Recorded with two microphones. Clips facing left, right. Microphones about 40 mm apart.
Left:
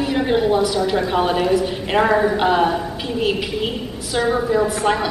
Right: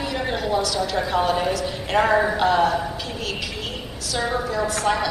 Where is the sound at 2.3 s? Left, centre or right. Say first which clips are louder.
Left 2 dB; centre.